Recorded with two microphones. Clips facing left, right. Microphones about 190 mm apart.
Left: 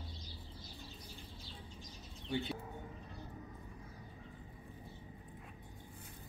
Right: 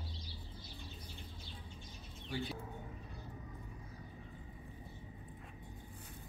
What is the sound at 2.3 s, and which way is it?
Speech, 25° left (ahead or behind).